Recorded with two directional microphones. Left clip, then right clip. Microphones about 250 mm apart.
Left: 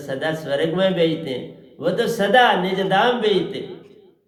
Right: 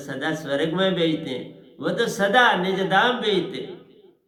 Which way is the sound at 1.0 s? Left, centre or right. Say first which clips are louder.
Left 3 dB; right.